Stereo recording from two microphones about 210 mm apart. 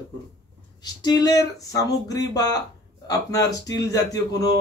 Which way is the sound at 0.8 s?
20° left (ahead or behind).